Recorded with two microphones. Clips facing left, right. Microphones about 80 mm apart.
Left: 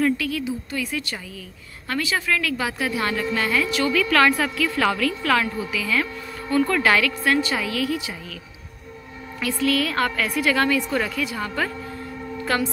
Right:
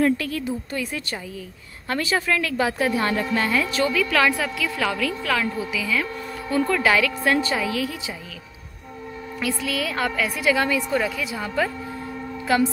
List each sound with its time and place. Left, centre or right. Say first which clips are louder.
0.0 s speech: right 1 dB; right
3.9 s a woman's voice: left 5 dB; centre
5.6 s a woman's voice: left 1 dB; centre
9.4 s a woman's voice: left 4 dB; centre